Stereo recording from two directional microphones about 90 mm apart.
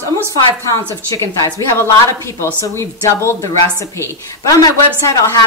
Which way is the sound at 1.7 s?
30° left (ahead or behind).